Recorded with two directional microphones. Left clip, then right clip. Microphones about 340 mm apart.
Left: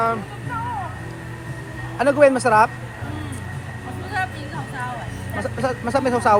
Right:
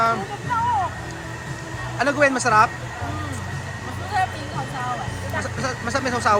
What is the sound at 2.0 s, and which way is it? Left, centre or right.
Speech, centre.